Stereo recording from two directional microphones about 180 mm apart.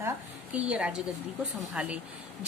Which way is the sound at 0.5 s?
5° right (ahead or behind).